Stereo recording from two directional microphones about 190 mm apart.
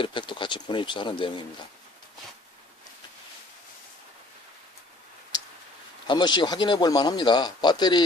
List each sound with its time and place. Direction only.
0.0 s a man's voice: 25° left (ahead or behind)
6.1 s a man's voice: 25° left (ahead or behind)